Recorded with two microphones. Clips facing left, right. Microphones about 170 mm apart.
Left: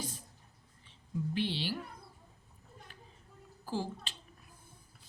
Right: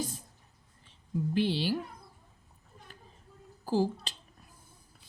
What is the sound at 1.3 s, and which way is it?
Speech, 40° right (ahead or behind).